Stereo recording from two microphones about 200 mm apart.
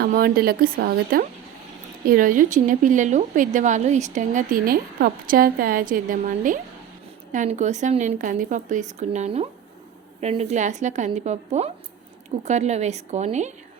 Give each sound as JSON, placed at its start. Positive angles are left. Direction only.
{"t": 0.0, "sound": "a woman's voice", "side_deg": -45}